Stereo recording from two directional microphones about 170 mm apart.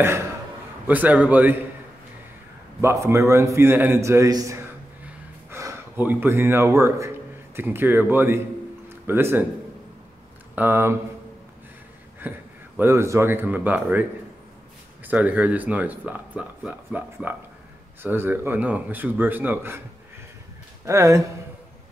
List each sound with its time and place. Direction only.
0.8 s speech: 10° right (ahead or behind)
2.8 s a man's voice: 15° right (ahead or behind)
8.8 s a sound: 15° right (ahead or behind)
10.5 s speech: 10° right (ahead or behind)
12.2 s speech: 10° right (ahead or behind)
15.0 s speech: 10° right (ahead or behind)
20.8 s speech: 15° right (ahead or behind)